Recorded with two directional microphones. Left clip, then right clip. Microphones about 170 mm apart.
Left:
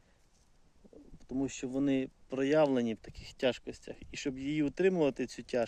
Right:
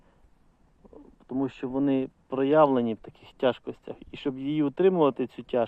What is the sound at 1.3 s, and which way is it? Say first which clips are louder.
Speech: right 6 dB; 25° left (ahead or behind).